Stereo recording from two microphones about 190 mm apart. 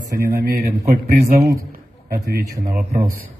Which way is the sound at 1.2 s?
15° right (ahead or behind).